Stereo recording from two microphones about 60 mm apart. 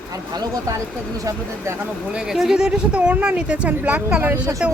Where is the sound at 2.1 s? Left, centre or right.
Centre.